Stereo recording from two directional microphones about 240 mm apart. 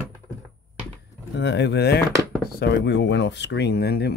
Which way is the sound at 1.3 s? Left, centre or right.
Left.